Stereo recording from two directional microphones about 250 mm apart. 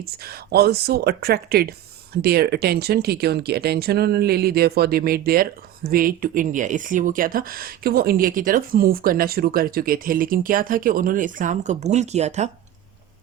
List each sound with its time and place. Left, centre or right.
0.0 s speech: right